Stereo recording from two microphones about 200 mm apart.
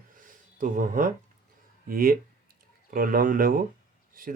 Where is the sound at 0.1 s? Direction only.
40° right (ahead or behind).